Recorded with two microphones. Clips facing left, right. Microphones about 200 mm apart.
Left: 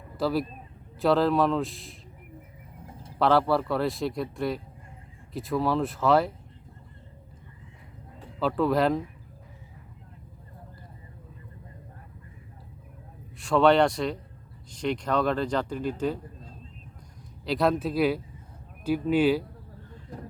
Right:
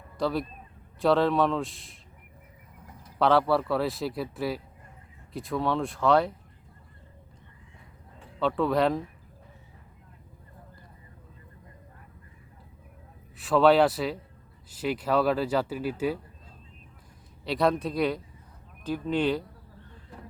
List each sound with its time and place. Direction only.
0.2 s speech: 5° left (ahead or behind)
2.8 s bird: 30° left (ahead or behind)
3.2 s speech: centre (ahead or behind)
8.4 s speech: centre (ahead or behind)
13.4 s speech: centre (ahead or behind)
17.4 s speech: centre (ahead or behind)